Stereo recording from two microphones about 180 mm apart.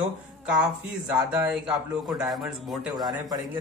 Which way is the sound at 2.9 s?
20° right (ahead or behind).